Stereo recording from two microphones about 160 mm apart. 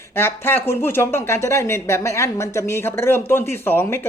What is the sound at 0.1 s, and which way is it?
Speech, 15° left (ahead or behind).